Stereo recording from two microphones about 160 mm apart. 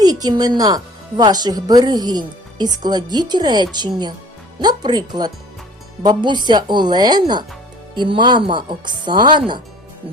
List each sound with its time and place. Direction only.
0.0 s a woman's voice: 25° right (ahead or behind)